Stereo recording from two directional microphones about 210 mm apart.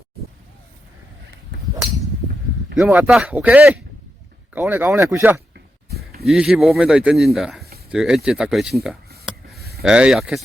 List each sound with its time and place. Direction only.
2.7 s speech: 5° right (ahead or behind)
9.6 s a sound: 50° right (ahead or behind)
9.8 s speech: 5° right (ahead or behind)